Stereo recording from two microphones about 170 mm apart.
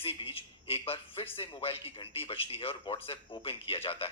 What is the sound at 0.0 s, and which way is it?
A man's voice, 35° left (ahead or behind).